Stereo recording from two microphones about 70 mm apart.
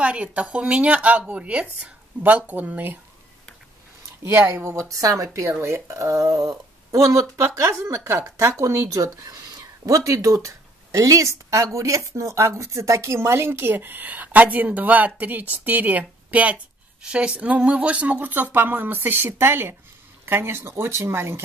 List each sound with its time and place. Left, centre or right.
0.0 s a woman's voice: centre
4.2 s a woman's voice: right